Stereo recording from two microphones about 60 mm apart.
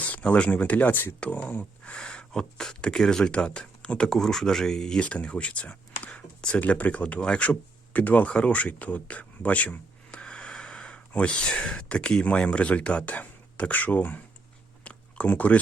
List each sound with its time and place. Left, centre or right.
0.0 s speech: left
1.9 s speech: centre
5.0 s speech: left
10.1 s speech: centre
14.8 s a sound: left